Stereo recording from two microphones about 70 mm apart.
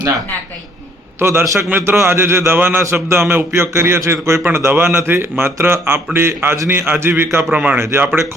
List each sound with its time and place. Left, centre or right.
1.2 s a man's voice: right
7.5 s speech: right
7.8 s a man's voice: right